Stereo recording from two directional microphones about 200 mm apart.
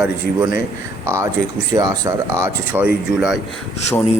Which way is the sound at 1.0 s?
15° right (ahead or behind).